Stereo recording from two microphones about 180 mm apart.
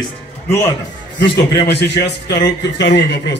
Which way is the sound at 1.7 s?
70° left (ahead or behind).